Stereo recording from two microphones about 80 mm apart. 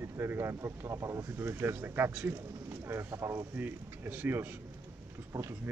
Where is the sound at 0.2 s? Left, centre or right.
Right.